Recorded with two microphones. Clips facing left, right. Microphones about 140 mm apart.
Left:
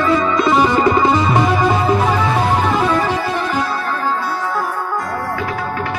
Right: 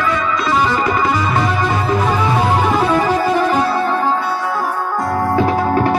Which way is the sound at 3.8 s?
25° right (ahead or behind).